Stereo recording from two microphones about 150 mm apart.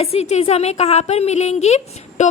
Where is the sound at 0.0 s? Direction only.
45° left (ahead or behind).